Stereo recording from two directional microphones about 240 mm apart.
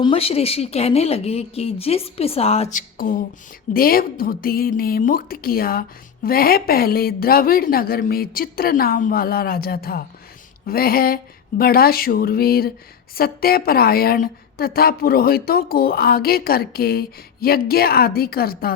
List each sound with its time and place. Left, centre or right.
0.0 s a woman's voice: left